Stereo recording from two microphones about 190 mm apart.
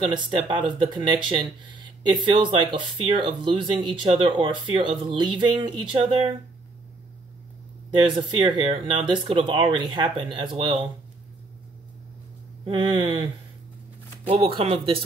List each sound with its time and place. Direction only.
0.0 s speech: 25° right (ahead or behind)
7.9 s speech: 25° right (ahead or behind)
12.6 s speech: 25° right (ahead or behind)